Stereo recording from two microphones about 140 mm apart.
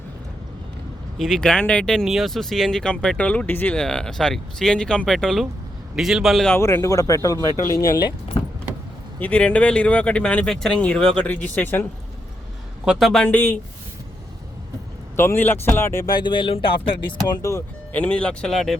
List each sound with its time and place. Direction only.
1.2 s speech: 5° left (ahead or behind)
6.6 s speech: 20° left (ahead or behind)
9.1 s speech: 10° left (ahead or behind)
12.8 s a man's voice: 5° right (ahead or behind)
13.2 s speech: 15° left (ahead or behind)
15.1 s speech: 15° left (ahead or behind); by 16.7 s 40° left (ahead or behind)
17.4 s speech: 20° left (ahead or behind)
18.0 s speech: 10° left (ahead or behind)